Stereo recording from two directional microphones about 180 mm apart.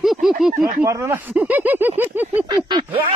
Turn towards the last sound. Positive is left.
turn(degrees=-25)  # may be behind; listen again after turning